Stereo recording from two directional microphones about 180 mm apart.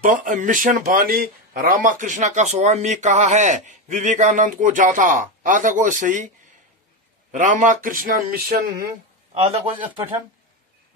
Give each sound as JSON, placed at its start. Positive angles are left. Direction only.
{"t": 0.0, "sound": "speech", "side_deg": -45}
{"t": 9.3, "sound": "a man's voice", "side_deg": -30}